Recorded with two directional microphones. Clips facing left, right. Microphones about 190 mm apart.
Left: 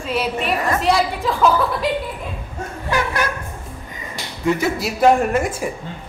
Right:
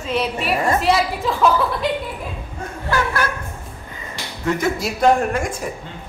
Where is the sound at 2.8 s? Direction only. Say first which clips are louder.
Even; 20° left (ahead or behind).